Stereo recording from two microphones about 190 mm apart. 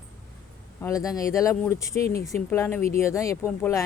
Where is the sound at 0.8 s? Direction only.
15° left (ahead or behind).